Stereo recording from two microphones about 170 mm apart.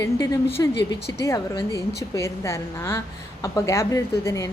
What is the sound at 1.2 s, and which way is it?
A woman's voice, 20° left (ahead or behind).